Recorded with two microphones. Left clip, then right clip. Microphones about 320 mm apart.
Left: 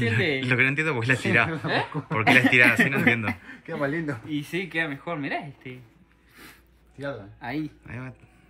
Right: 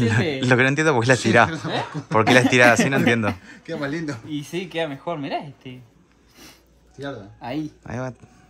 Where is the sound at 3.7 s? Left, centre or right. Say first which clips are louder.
Right 1 dB; centre.